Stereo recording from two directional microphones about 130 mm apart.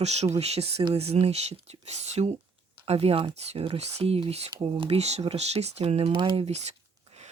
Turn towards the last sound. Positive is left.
turn(degrees=-60)  # may be behind; listen again after turning